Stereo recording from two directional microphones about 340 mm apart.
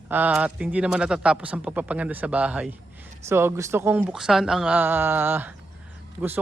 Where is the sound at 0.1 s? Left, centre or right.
Centre.